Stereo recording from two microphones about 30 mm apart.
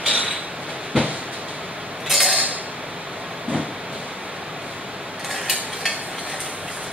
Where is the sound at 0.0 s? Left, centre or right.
Right.